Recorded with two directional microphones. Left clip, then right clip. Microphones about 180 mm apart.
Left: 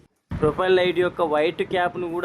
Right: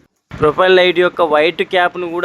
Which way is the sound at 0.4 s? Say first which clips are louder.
Right 9 dB; 20° right (ahead or behind).